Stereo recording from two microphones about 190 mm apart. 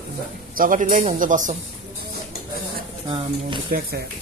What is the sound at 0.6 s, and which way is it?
A man's voice, 45° right (ahead or behind).